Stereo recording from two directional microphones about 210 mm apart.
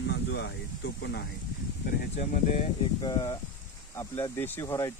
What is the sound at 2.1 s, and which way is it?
Speech, 30° left (ahead or behind).